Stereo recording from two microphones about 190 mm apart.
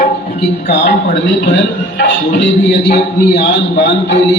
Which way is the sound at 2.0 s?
70° left (ahead or behind).